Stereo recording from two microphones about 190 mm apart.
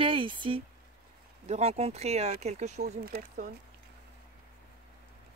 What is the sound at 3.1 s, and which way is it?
Speech, 55° right (ahead or behind).